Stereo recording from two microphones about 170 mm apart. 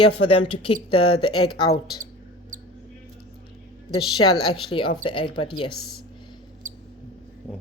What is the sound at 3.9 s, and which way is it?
Speech, 30° left (ahead or behind).